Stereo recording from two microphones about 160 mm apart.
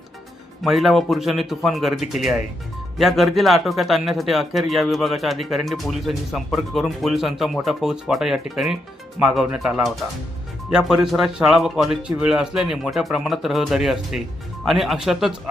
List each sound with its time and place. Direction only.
0.6 s speech: centre (ahead or behind)